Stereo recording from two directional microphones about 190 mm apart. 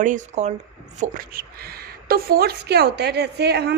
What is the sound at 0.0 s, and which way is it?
A woman's voice, 40° right (ahead or behind).